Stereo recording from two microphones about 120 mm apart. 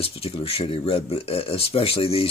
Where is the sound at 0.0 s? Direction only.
55° left (ahead or behind).